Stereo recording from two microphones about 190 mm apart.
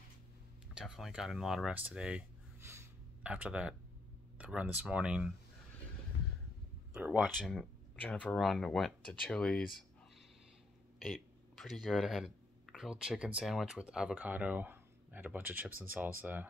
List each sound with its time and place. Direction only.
0.7 s speech: centre (ahead or behind)
6.9 s speech: 5° right (ahead or behind)
11.0 s speech: centre (ahead or behind)